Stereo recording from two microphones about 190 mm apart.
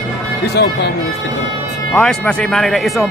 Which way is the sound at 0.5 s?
60° left (ahead or behind).